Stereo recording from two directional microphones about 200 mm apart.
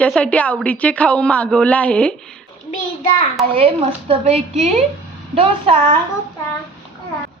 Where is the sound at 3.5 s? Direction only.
25° right (ahead or behind).